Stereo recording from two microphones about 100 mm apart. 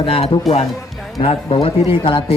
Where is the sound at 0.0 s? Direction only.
65° left (ahead or behind); by 0.6 s 85° left.